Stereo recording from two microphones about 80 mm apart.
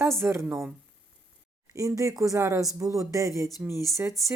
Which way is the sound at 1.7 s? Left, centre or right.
Right.